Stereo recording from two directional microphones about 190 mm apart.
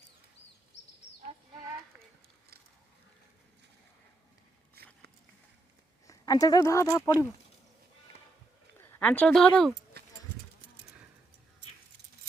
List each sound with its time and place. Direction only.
6.1 s speech: 20° left (ahead or behind)
8.8 s speech: 5° left (ahead or behind)